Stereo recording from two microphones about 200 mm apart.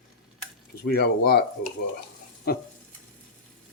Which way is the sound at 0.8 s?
50° left (ahead or behind).